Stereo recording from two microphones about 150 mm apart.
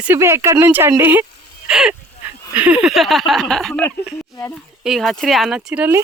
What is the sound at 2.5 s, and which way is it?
Speech, 10° right (ahead or behind).